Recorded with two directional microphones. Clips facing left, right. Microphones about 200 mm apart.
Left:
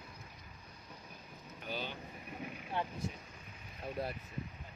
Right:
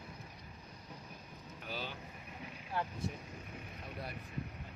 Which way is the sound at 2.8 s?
20° left (ahead or behind).